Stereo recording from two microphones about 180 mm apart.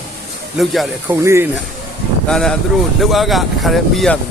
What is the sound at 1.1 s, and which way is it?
Speech, 15° right (ahead or behind).